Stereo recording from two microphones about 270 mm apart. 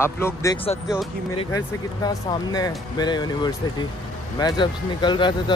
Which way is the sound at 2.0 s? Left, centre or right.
Centre.